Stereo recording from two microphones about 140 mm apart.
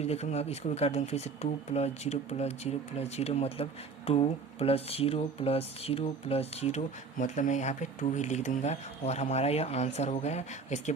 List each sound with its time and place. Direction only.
0.0 s speech: 50° left (ahead or behind)